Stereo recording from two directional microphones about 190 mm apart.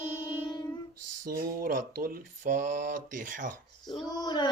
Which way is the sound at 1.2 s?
50° right (ahead or behind).